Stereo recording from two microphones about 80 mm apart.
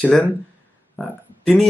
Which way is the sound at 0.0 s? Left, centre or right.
Centre.